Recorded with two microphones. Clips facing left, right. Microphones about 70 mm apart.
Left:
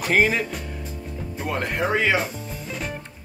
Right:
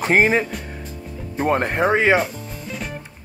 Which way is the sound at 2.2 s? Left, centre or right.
Centre.